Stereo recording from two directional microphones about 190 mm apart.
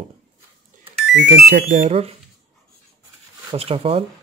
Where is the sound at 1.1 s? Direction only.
65° right (ahead or behind).